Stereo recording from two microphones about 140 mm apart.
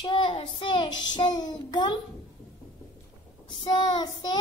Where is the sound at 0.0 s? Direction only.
35° left (ahead or behind).